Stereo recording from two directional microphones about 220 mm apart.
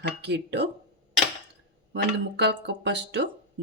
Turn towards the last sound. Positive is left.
turn(degrees=-50)  # may be behind; listen again after turning